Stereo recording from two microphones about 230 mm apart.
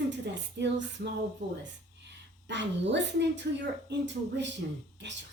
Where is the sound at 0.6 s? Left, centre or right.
Right.